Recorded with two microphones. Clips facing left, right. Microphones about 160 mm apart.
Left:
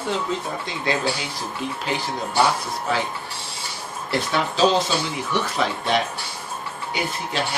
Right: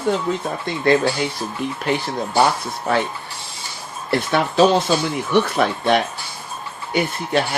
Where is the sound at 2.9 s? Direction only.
55° right (ahead or behind).